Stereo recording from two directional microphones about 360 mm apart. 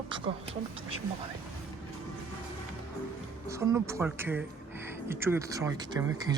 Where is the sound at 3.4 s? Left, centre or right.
Centre.